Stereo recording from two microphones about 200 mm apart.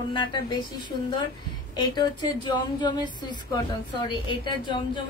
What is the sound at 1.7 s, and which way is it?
A woman's voice, 20° left (ahead or behind).